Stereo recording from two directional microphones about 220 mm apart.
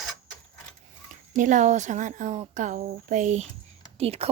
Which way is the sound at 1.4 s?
35° right (ahead or behind).